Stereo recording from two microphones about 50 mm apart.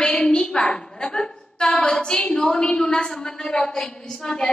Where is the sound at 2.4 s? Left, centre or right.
Centre.